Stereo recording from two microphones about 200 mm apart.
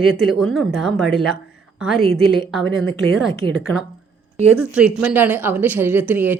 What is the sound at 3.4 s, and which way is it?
Speech, 25° right (ahead or behind).